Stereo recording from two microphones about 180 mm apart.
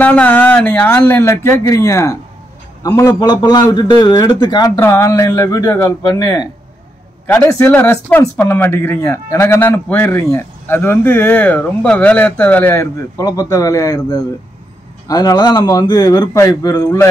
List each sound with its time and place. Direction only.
0.0 s a man's voice: 10° left (ahead or behind)
6.0 s a man's voice: 25° left (ahead or behind)